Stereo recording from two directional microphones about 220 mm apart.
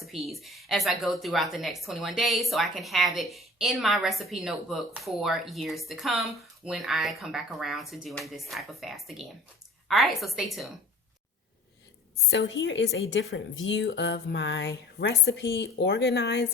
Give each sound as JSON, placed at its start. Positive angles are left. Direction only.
{"t": 0.0, "sound": "speech", "side_deg": 0}
{"t": 12.3, "sound": "a woman's voice", "side_deg": 55}